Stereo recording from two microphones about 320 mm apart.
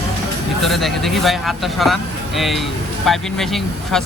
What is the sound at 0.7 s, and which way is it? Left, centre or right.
Speech, centre.